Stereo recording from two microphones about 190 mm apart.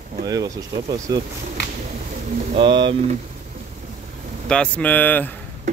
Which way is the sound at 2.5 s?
25° right (ahead or behind).